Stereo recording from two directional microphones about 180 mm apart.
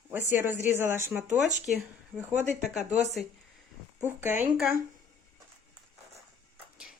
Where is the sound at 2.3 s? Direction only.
40° right (ahead or behind).